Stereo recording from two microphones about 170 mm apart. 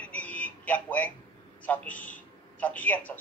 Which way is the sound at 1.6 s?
10° left (ahead or behind).